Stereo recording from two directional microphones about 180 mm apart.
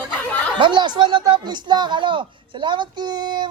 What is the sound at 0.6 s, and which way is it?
Speech, 25° right (ahead or behind).